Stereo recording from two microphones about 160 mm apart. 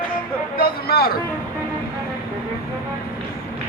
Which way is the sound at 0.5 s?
70° left (ahead or behind).